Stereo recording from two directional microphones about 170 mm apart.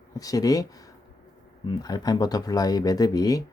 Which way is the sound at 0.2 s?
20° left (ahead or behind).